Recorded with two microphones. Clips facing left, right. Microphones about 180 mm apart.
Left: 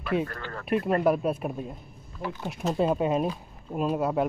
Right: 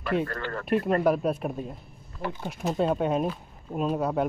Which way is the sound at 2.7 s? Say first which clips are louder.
Even; 5° left (ahead or behind).